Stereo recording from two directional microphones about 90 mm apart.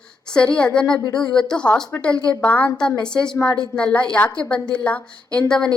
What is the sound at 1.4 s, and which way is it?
A woman's voice, 10° left (ahead or behind).